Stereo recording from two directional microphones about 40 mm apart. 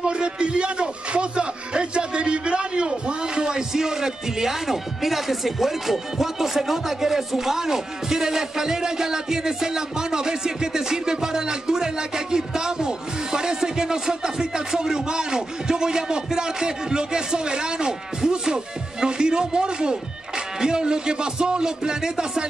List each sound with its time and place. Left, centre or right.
0.0 s a man's voice: right